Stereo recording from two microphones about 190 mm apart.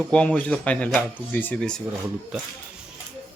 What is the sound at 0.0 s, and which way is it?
Speech, 5° left (ahead or behind).